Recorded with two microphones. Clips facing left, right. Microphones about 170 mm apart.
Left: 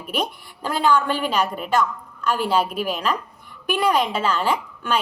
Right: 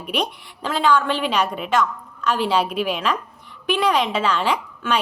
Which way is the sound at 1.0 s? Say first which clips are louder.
Right 1 dB; 45° left (ahead or behind).